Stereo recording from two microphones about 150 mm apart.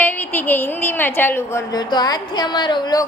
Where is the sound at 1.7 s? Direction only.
25° left (ahead or behind).